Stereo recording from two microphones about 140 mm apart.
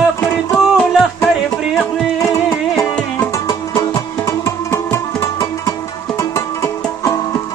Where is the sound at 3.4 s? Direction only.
25° left (ahead or behind).